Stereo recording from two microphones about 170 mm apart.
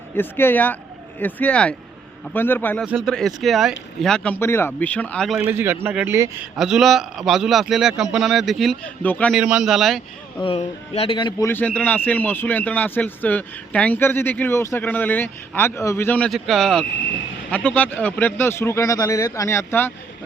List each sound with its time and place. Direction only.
0.2 s a man's voice: 10° left (ahead or behind)
5.5 s a man's voice: 10° right (ahead or behind)
6.6 s a man's voice: centre (ahead or behind)
9.3 s a man's voice: 5° right (ahead or behind)
10.4 s a man's voice: 35° left (ahead or behind)
11.4 s speech: 10° left (ahead or behind)